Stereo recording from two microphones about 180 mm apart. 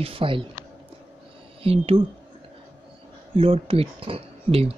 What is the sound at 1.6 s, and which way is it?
Speech, 30° right (ahead or behind).